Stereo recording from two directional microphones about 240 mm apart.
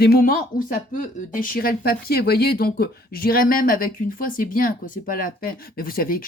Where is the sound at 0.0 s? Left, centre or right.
Left.